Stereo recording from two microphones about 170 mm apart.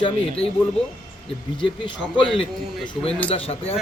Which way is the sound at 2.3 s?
30° left (ahead or behind).